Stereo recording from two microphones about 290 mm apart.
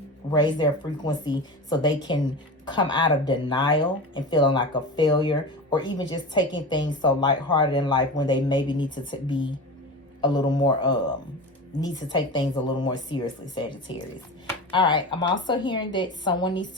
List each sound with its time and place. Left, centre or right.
0.3 s speech: centre
12.1 s speech: centre